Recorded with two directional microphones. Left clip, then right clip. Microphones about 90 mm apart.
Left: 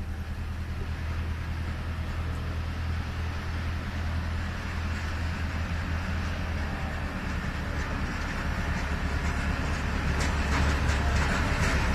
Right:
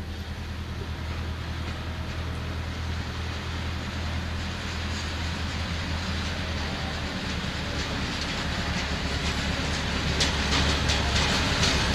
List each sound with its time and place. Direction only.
9.7 s vehicle: 40° right (ahead or behind)